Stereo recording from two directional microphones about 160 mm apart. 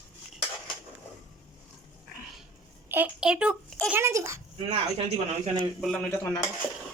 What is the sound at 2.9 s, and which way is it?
A child's voice, 10° right (ahead or behind).